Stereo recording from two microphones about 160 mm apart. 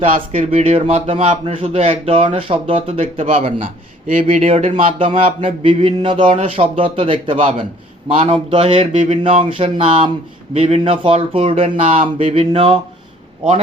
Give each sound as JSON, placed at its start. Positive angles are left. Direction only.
{"t": 0.3, "sound": "speech", "side_deg": -40}
{"t": 3.0, "sound": "speech", "side_deg": -50}